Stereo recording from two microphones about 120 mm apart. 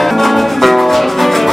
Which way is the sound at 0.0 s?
Centre (ahead or behind).